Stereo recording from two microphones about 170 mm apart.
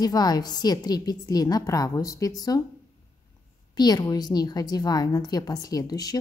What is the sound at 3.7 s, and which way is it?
A woman's voice, 25° left (ahead or behind).